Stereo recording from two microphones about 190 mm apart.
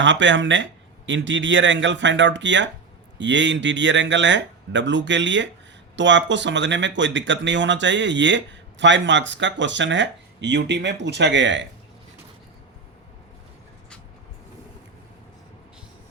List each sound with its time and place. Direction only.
0.0 s speech: 75° right (ahead or behind)